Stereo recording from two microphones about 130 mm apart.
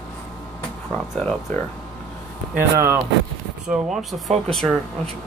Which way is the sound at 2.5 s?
20° right (ahead or behind).